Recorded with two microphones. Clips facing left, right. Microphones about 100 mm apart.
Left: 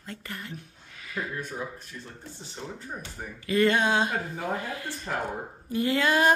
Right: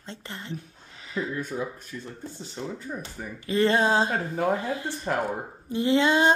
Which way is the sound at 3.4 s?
30° right (ahead or behind).